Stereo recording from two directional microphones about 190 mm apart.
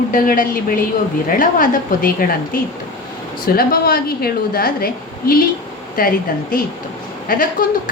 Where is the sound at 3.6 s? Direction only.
55° left (ahead or behind).